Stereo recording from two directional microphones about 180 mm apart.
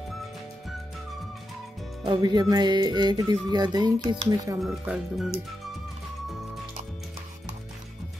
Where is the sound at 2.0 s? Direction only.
25° right (ahead or behind).